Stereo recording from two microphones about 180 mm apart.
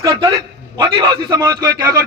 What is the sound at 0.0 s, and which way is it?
A man's voice, 25° right (ahead or behind).